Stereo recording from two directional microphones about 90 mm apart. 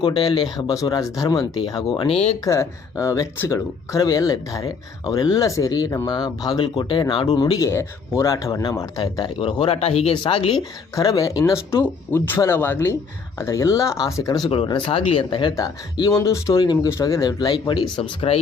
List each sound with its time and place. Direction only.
0.0 s speech: 55° left (ahead or behind)
1.9 s speech: 80° left
2.4 s speech: 35° left (ahead or behind)
6.7 s speech: 65° left (ahead or behind); by 7.5 s 80° left
7.6 s speech: 30° left (ahead or behind)
9.0 s speech: 60° left (ahead or behind); by 10.6 s 80° left
10.9 s speech: 45° left (ahead or behind)
14.2 s speech: 45° left (ahead or behind)
14.5 s speech: 70° left (ahead or behind)
15.5 s speech: 45° left (ahead or behind)
17.5 s speech: 60° left (ahead or behind)